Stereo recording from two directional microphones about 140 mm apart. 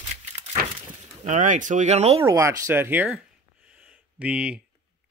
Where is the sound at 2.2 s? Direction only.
20° right (ahead or behind).